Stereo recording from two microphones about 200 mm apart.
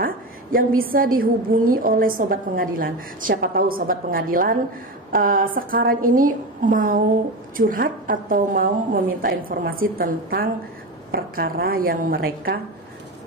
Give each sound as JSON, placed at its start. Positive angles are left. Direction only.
{"t": 0.0, "sound": "a woman's voice", "side_deg": -45}